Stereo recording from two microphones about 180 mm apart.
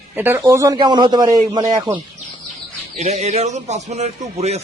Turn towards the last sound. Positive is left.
turn(degrees=-35)  # may be behind; listen again after turning